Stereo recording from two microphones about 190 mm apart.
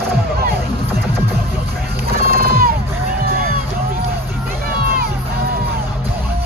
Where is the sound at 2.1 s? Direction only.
50° right (ahead or behind).